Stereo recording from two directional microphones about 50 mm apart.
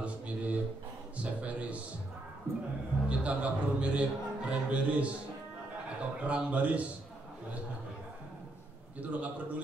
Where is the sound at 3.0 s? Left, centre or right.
Right.